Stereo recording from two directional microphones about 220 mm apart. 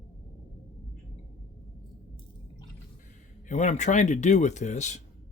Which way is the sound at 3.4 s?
35° left (ahead or behind).